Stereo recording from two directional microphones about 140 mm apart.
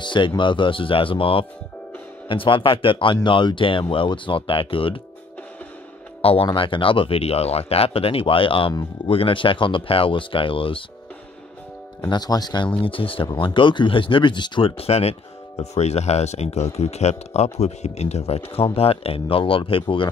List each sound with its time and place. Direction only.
0.0 s speech: 35° left (ahead or behind)
6.2 s speech: 40° left (ahead or behind)
12.0 s speech: 30° left (ahead or behind)
12.8 s speech: 40° left (ahead or behind)